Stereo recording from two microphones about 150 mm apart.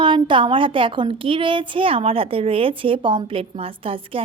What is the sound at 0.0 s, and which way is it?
A woman's voice, 35° right (ahead or behind).